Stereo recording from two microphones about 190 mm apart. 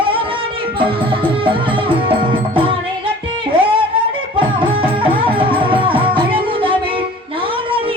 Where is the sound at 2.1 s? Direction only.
30° right (ahead or behind).